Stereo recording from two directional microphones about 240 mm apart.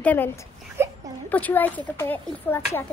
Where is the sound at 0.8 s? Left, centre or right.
Centre.